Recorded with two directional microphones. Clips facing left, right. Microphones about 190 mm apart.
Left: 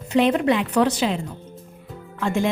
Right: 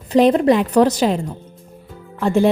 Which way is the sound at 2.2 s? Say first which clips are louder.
Right 7 dB; 35° right (ahead or behind).